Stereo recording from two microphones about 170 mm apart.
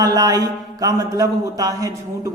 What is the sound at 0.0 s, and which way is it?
Speech, 20° right (ahead or behind).